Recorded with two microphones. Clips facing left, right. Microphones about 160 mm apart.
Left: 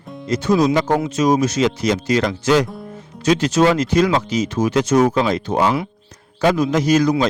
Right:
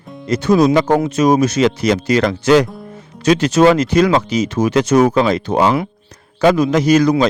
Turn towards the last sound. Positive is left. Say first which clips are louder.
# right 3 dB
turn(degrees=-70)  # may be behind; listen again after turning